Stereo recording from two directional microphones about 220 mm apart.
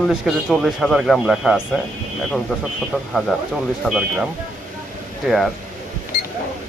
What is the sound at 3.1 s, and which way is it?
Speech, centre (ahead or behind).